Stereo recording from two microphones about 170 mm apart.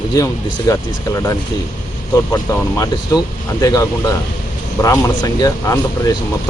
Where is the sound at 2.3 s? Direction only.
20° left (ahead or behind).